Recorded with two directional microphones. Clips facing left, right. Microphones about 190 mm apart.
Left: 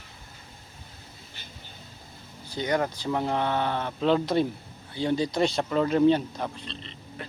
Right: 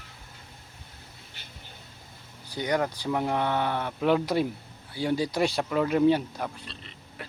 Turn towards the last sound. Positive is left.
turn(degrees=-10)  # may be behind; listen again after turning